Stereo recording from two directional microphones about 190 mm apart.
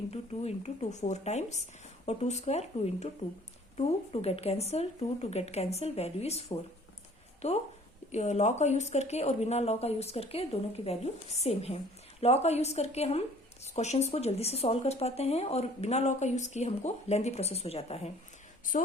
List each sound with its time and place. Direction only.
0.1 s speech: 35° left (ahead or behind)